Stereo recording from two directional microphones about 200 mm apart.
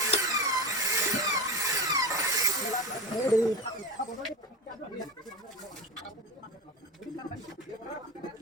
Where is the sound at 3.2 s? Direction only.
20° left (ahead or behind).